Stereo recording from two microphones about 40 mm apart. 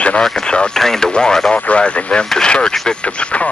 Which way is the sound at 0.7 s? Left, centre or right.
Centre.